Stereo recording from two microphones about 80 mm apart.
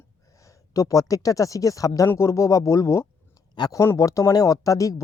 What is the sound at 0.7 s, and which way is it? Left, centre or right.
Speech, left.